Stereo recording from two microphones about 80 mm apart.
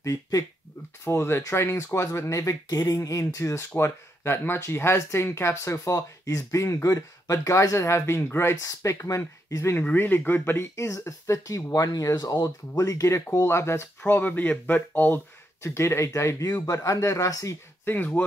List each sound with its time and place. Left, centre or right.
0.0 s speech: left
1.0 s speech: left
9.8 s speech: left
15.6 s speech: left
17.8 s speech: left